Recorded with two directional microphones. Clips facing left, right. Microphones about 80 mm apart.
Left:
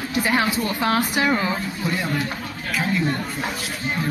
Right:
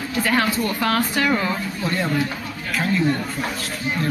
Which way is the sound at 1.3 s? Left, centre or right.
Centre.